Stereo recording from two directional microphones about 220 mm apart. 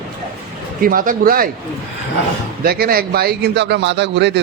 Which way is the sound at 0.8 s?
40° right (ahead or behind).